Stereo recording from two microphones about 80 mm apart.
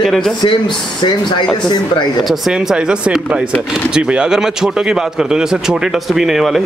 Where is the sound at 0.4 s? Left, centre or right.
Left.